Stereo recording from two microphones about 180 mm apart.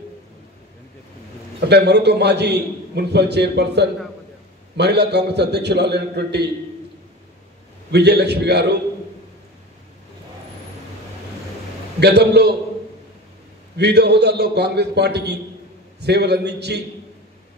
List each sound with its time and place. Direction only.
1.7 s a man's voice: 70° right (ahead or behind)
7.9 s a man's voice: 65° right (ahead or behind)
12.0 s a man's voice: 65° right (ahead or behind)
13.7 s a man's voice: 65° right (ahead or behind)